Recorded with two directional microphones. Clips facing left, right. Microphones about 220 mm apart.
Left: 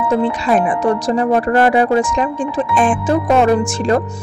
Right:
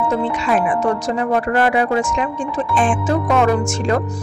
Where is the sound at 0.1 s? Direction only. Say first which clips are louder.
Left 7 dB; 35° left (ahead or behind).